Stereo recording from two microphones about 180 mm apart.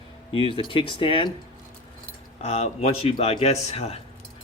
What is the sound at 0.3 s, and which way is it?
Speech, 30° left (ahead or behind).